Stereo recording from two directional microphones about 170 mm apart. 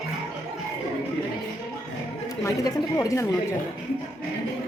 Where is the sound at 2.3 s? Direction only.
20° left (ahead or behind).